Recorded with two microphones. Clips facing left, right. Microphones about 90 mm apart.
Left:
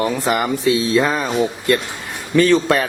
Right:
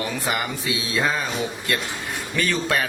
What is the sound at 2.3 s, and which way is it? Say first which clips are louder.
Speech: left 10 dB; 40° left (ahead or behind).